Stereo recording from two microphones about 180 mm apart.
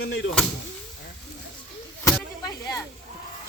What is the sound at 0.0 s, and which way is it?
Speech, 90° left.